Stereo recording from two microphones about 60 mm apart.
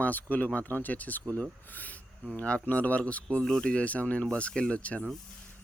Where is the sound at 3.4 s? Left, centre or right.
Centre.